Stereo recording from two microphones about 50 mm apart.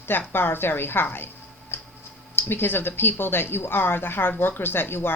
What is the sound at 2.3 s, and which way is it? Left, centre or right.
Speech, left.